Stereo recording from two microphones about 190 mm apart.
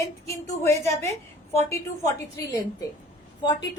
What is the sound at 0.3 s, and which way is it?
Speech, 15° left (ahead or behind).